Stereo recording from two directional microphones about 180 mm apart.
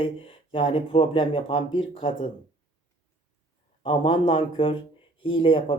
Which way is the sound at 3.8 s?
30° left (ahead or behind).